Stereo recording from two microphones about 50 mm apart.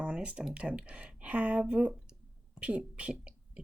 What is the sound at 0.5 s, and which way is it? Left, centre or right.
Speech, right.